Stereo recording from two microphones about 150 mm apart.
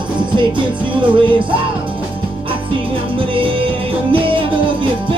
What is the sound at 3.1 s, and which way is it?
Music, 35° right (ahead or behind).